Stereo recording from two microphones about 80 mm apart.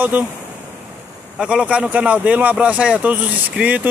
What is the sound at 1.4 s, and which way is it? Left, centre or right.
A man's voice, centre.